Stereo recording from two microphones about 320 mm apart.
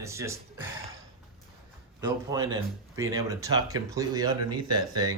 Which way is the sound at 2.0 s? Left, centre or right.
Centre.